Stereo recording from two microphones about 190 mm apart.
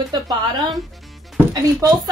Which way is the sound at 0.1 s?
20° right (ahead or behind).